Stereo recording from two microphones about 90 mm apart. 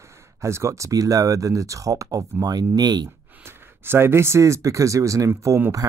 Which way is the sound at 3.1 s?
25° right (ahead or behind).